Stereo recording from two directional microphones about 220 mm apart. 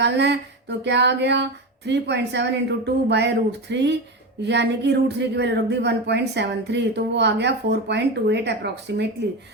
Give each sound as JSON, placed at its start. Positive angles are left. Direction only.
{"t": 0.0, "sound": "speech", "side_deg": -50}